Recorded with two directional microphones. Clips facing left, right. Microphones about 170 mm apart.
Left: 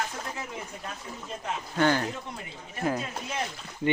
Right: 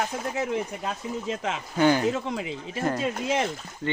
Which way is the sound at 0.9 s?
90° right.